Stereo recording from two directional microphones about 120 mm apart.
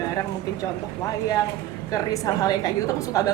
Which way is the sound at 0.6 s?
30° left (ahead or behind).